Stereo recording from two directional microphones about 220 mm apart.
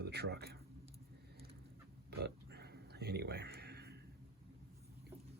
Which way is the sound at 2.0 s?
50° right (ahead or behind).